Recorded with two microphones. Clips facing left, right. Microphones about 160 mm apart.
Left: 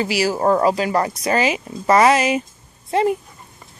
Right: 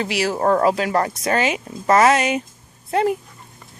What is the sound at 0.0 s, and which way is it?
Speech, centre (ahead or behind).